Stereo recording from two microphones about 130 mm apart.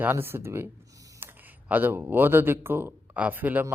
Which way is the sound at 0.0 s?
15° right (ahead or behind).